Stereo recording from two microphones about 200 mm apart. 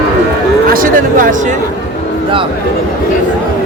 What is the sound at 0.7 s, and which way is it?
Speech, 45° right (ahead or behind).